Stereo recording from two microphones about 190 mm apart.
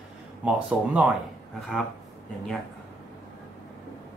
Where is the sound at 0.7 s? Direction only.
5° right (ahead or behind).